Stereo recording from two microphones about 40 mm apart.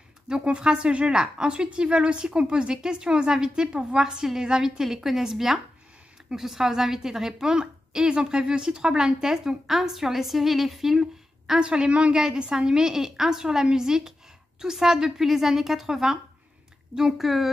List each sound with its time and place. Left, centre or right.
0.3 s a woman's voice: right
11.6 s a woman's voice: right; by 17.5 s centre